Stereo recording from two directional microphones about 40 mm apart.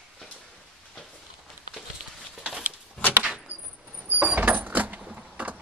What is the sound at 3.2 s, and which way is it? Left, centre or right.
Keys jangling, right.